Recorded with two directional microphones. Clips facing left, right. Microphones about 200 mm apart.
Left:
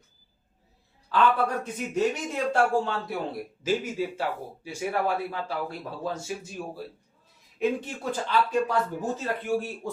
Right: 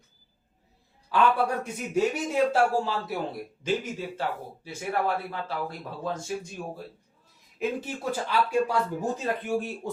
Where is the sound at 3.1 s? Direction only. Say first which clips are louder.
Even; centre (ahead or behind).